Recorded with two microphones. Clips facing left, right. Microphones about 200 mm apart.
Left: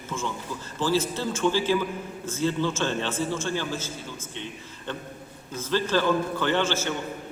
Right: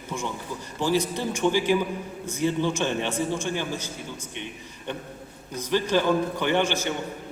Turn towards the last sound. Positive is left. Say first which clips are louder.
# right 1 dB
turn(degrees=-15)  # may be behind; listen again after turning